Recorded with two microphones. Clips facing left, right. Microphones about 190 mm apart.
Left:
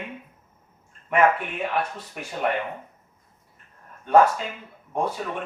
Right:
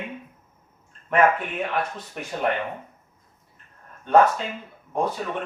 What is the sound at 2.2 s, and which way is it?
Speech, 5° left (ahead or behind).